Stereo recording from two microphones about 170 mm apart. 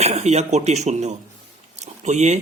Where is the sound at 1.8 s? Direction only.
40° right (ahead or behind).